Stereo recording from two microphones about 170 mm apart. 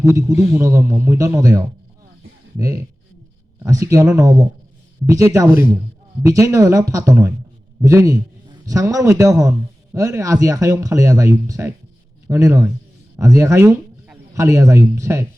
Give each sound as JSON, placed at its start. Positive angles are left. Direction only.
{"t": 0.0, "sound": "a man's voice", "side_deg": -15}